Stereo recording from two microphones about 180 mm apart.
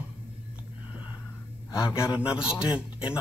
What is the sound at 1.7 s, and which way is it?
Speech, 15° left (ahead or behind).